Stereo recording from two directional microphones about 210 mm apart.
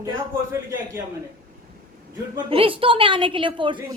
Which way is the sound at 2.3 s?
25° right (ahead or behind).